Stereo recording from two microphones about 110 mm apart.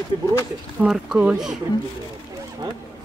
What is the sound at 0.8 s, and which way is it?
Speech, 10° right (ahead or behind).